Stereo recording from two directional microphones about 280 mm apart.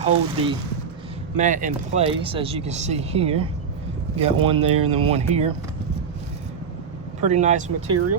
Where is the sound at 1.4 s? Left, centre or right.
Right.